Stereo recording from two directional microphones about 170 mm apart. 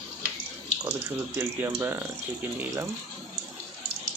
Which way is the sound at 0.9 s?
10° right (ahead or behind).